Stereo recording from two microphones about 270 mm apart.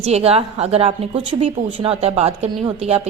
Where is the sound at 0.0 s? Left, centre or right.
Right.